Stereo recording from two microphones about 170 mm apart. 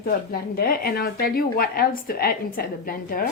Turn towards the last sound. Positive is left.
turn(degrees=55)  # may be behind; listen again after turning